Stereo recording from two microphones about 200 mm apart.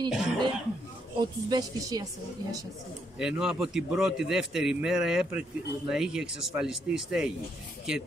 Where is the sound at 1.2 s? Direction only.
20° right (ahead or behind).